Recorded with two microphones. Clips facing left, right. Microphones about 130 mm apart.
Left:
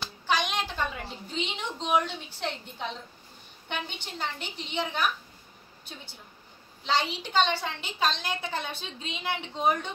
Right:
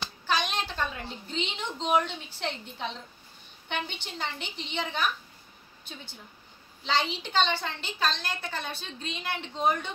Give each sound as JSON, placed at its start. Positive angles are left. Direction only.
{"t": 0.3, "sound": "a sound", "side_deg": 15}
{"t": 0.9, "sound": "a woman's voice", "side_deg": 5}
{"t": 6.9, "sound": "a woman's voice", "side_deg": 10}
{"t": 8.0, "sound": "a woman's voice", "side_deg": 20}
{"t": 9.6, "sound": "speech", "side_deg": 5}